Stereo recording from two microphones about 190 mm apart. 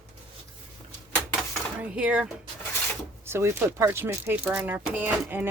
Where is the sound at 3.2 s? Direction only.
15° right (ahead or behind).